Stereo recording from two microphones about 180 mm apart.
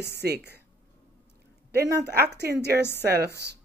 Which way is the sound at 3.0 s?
65° right (ahead or behind).